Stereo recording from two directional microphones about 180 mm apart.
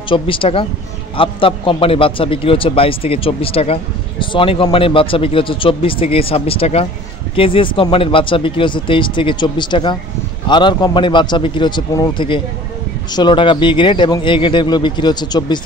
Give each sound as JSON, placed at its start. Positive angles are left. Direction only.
{"t": 0.1, "sound": "a man's voice", "side_deg": 30}